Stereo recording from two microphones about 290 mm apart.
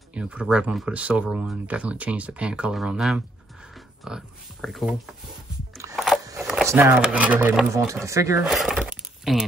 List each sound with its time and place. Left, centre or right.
0.1 s speech: centre
6.4 s speech: centre